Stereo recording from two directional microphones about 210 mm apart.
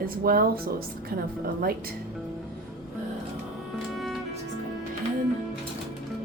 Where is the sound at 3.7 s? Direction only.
Centre (ahead or behind).